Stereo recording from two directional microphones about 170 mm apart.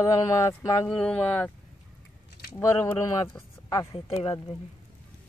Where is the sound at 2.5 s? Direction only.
15° left (ahead or behind).